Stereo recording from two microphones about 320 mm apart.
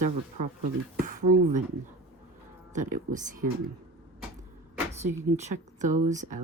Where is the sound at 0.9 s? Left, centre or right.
Right.